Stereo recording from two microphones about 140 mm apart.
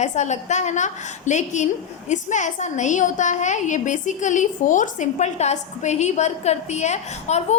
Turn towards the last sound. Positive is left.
turn(degrees=55)  # may be behind; listen again after turning